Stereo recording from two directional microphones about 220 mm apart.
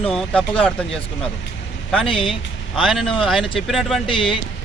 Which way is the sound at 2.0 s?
25° left (ahead or behind).